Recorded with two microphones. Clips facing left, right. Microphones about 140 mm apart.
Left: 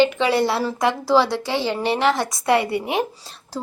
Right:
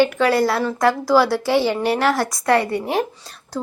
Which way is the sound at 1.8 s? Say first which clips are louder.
Right 1 dB; centre (ahead or behind).